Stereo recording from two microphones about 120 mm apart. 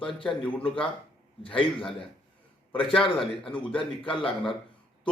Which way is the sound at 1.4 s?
45° left (ahead or behind).